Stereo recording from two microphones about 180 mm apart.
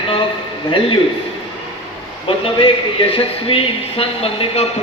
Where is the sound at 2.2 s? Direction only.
30° left (ahead or behind).